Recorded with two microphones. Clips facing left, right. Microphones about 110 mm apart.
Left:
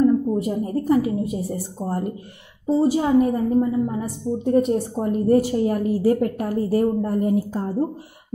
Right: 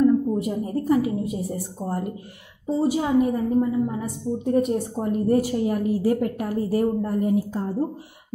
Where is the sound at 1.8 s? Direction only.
20° left (ahead or behind).